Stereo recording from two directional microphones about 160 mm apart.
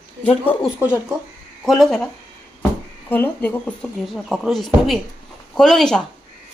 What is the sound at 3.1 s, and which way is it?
Speech, 10° left (ahead or behind).